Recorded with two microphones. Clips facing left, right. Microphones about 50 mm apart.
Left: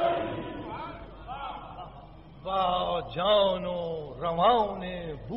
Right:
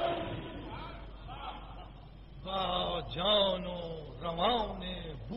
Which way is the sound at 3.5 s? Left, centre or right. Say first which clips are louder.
Left 6 dB; left.